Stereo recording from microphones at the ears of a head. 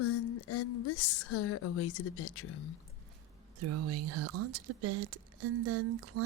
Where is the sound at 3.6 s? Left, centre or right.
Right.